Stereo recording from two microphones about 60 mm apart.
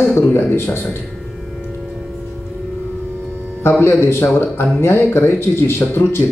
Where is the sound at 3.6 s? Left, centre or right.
Left.